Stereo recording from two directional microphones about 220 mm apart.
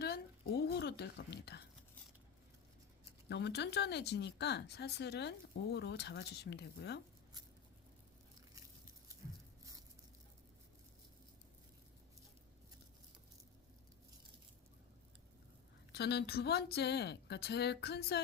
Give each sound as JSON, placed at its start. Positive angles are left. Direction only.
{"t": 0.0, "sound": "a woman's voice", "side_deg": 45}
{"t": 3.2, "sound": "speech", "side_deg": 50}
{"t": 15.9, "sound": "speech", "side_deg": 50}